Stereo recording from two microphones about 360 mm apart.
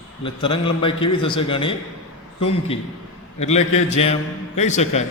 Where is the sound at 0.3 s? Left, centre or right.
Centre.